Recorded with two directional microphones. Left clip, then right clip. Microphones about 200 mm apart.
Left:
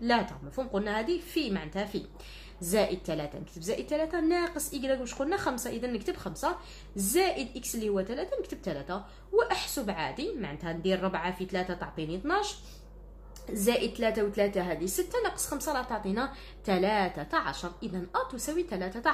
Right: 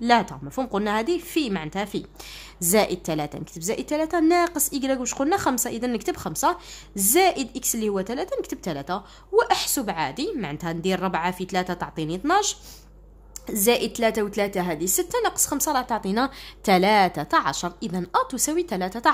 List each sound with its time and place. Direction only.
0.0 s a woman's voice: 40° right (ahead or behind)